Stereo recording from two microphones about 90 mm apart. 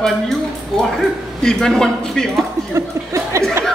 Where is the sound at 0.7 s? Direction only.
5° left (ahead or behind).